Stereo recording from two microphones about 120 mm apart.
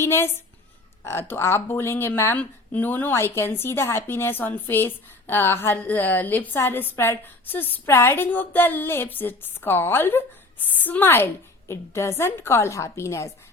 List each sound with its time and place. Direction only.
0.0 s a woman's voice: 20° left (ahead or behind)